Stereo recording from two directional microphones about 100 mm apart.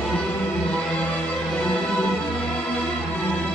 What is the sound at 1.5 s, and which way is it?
Music, 5° left (ahead or behind).